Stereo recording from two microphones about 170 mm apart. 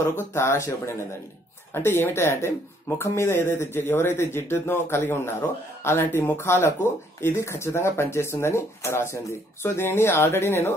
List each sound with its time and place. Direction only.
0.3 s speech: 15° left (ahead or behind)